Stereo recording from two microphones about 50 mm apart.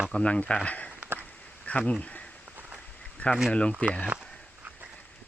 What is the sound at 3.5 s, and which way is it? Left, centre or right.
Speech, left.